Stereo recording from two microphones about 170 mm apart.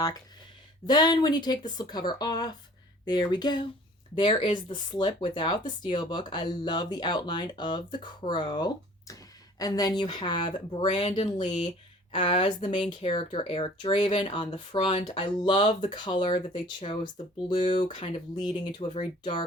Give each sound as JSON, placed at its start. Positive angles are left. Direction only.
{"t": 0.9, "sound": "speech", "side_deg": 25}